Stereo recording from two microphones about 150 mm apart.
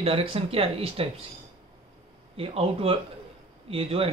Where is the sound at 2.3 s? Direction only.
40° right (ahead or behind).